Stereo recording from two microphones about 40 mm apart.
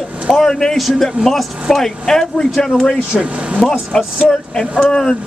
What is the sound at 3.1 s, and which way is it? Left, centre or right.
Speech, right.